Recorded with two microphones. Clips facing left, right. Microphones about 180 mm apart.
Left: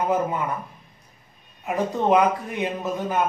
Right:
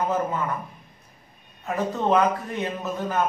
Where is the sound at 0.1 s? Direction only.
15° left (ahead or behind).